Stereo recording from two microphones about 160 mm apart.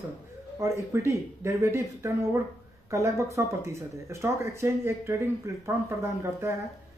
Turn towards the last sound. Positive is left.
turn(degrees=-15)  # may be behind; listen again after turning